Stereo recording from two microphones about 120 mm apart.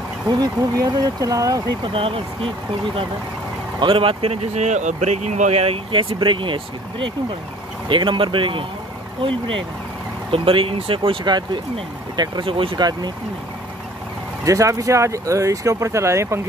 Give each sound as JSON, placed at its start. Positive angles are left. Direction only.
{"t": 0.3, "sound": "speech", "side_deg": -30}
{"t": 1.8, "sound": "speech", "side_deg": -45}
{"t": 3.8, "sound": "speech", "side_deg": -45}
{"t": 10.3, "sound": "speech", "side_deg": -50}
{"t": 14.4, "sound": "speech", "side_deg": -30}